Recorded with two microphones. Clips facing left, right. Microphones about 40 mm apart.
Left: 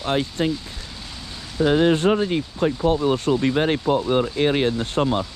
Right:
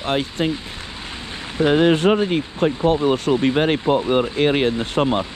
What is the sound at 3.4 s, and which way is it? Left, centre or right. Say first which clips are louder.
Speech: right 2 dB; right.